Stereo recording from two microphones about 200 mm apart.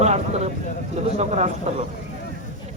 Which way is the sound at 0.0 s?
30° right (ahead or behind).